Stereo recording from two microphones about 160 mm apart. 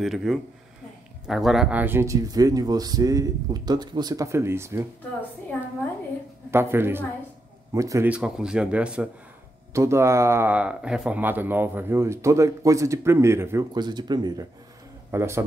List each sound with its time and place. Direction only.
0.0 s speech: centre (ahead or behind); by 4.8 s 15° right (ahead or behind)
6.5 s speech: 15° right (ahead or behind)
8.1 s speech: 5° right (ahead or behind); by 14.3 s 25° right (ahead or behind)
15.0 s a man's voice: 15° right (ahead or behind)